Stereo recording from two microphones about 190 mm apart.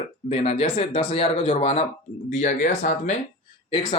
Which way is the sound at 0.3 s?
35° left (ahead or behind).